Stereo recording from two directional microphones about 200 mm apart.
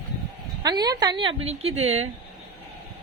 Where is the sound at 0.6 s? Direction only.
20° right (ahead or behind).